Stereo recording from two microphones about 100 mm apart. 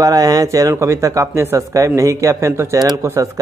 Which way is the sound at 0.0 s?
40° right (ahead or behind).